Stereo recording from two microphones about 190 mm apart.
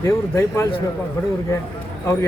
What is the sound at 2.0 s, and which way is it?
Speech, 15° left (ahead or behind).